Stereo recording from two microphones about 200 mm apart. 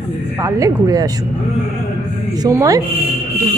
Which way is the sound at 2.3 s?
20° right (ahead or behind).